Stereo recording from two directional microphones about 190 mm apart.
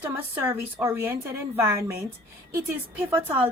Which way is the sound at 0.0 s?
15° right (ahead or behind).